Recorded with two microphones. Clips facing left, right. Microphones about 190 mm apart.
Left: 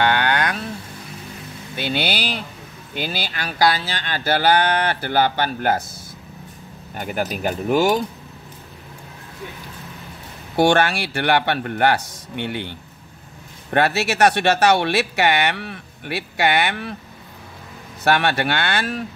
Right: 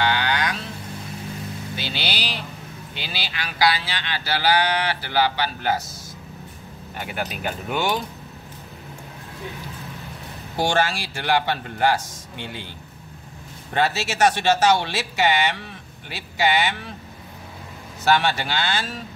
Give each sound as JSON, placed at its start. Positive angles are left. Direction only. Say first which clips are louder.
{"t": 0.0, "sound": "a sound", "louder": "left 3 dB", "side_deg": 55}
{"t": 1.8, "sound": "speech", "louder": "left 8 dB", "side_deg": 55}
{"t": 7.0, "sound": "speech", "louder": "left 5 dB", "side_deg": 45}
{"t": 10.5, "sound": "speech", "louder": "left 6 dB", "side_deg": 60}
{"t": 13.7, "sound": "speech", "louder": "left 4 dB", "side_deg": 65}
{"t": 18.0, "sound": "speech", "louder": "left 2 dB", "side_deg": 60}